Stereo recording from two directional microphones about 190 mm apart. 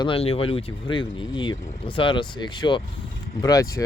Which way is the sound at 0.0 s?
30° left (ahead or behind).